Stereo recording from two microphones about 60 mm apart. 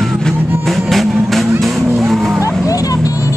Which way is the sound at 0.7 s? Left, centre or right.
Centre.